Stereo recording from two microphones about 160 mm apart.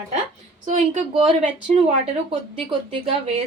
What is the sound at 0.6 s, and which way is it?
Speech, 45° right (ahead or behind).